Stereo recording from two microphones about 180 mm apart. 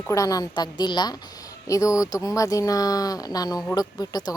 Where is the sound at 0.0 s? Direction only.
20° left (ahead or behind).